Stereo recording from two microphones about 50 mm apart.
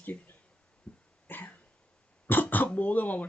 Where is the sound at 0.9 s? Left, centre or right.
Centre.